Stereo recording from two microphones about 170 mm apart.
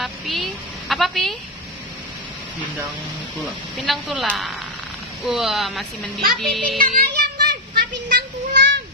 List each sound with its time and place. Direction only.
0.0 s a woman's voice: centre (ahead or behind)
3.7 s speech: centre (ahead or behind)
6.8 s child singing: 55° right (ahead or behind); by 8.7 s 80° right